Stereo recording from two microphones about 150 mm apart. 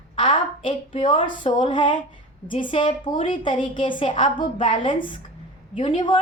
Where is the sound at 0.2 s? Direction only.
35° left (ahead or behind).